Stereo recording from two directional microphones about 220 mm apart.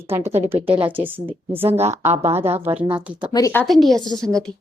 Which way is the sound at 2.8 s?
5° right (ahead or behind).